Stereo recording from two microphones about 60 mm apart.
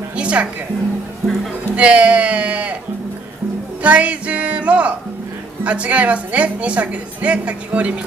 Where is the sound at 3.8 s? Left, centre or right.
Right.